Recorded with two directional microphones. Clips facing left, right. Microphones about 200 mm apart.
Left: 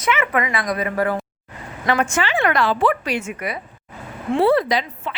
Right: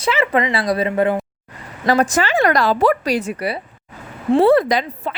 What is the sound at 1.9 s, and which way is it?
A woman's voice, 40° right (ahead or behind).